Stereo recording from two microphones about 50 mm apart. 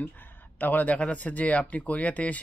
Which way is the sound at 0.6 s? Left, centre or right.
Left.